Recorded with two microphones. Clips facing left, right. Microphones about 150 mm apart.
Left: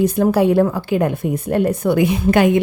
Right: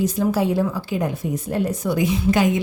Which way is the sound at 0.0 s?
60° left (ahead or behind).